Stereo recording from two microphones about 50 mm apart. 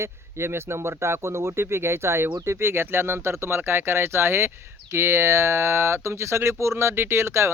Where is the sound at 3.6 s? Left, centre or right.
Right.